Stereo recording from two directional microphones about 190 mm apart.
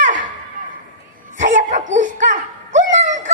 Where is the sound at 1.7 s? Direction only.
40° right (ahead or behind).